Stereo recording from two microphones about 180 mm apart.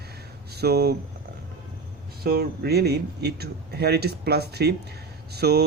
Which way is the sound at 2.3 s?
60° right (ahead or behind).